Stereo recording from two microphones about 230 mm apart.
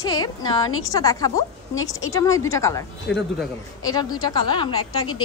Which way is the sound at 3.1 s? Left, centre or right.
Left.